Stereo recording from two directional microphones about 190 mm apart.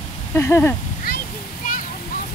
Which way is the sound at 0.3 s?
15° left (ahead or behind).